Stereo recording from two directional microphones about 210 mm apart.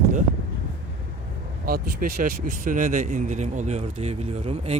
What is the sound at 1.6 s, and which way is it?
A man's voice, 45° right (ahead or behind).